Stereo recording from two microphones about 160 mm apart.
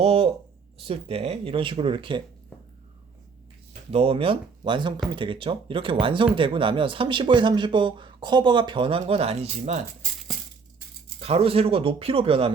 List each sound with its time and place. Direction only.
0.0 s speech: 35° right (ahead or behind)
3.9 s speech: 35° right (ahead or behind)
11.2 s speech: 40° right (ahead or behind)